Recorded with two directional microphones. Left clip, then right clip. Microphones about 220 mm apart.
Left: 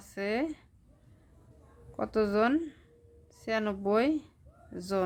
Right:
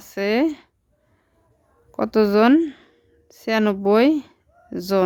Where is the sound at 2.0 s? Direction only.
45° right (ahead or behind).